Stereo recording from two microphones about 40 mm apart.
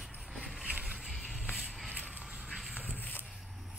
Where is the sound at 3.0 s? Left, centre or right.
Left.